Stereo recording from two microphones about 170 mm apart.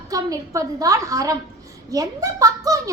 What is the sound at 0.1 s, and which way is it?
A woman's voice, 20° right (ahead or behind).